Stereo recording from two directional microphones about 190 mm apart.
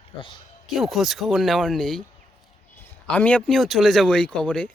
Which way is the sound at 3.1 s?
10° left (ahead or behind).